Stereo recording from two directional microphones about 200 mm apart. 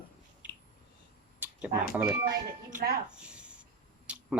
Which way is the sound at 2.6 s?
40° right (ahead or behind).